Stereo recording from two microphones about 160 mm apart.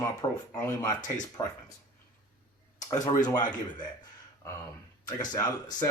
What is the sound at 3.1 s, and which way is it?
Speech, 25° left (ahead or behind).